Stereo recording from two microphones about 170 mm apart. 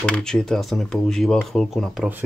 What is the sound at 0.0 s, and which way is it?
Speech, 5° left (ahead or behind).